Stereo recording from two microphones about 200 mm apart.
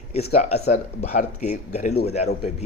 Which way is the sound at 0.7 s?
35° left (ahead or behind).